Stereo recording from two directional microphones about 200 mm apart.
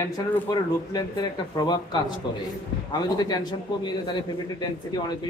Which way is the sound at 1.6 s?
20° left (ahead or behind).